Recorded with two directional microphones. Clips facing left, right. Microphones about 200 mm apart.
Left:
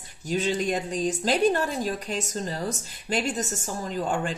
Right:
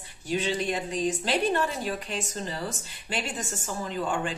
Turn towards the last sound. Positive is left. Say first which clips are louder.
# left 2 dB
turn(degrees=45)  # may be behind; listen again after turning